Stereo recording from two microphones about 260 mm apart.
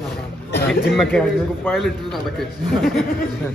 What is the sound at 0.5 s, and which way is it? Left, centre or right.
Speech, left.